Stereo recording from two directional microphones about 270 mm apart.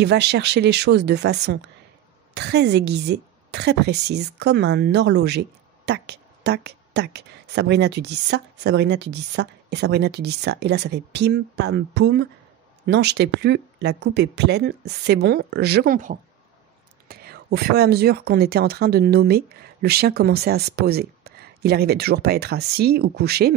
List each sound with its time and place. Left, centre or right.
0.0 s a woman's voice: right